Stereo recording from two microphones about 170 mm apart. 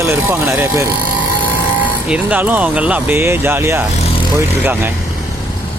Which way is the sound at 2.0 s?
5° right (ahead or behind).